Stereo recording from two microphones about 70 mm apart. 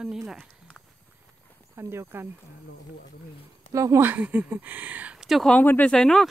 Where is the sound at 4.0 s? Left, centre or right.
Right.